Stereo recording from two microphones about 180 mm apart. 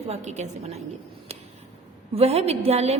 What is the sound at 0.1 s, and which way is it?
Speech, 40° right (ahead or behind).